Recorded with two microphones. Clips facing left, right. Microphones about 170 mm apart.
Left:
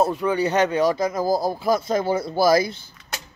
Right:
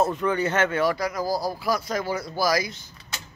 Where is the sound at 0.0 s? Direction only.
10° left (ahead or behind).